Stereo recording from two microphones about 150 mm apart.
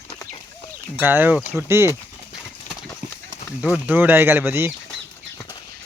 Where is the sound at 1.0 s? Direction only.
10° right (ahead or behind).